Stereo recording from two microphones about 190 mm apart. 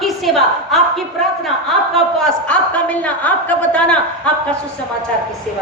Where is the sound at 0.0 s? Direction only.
Centre (ahead or behind).